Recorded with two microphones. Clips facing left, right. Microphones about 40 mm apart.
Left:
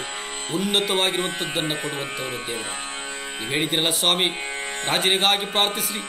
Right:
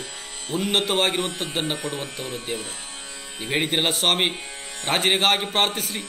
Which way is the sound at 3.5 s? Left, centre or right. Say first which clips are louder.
Right 1 dB; centre.